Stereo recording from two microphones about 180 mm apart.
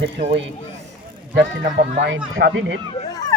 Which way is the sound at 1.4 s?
70° right (ahead or behind).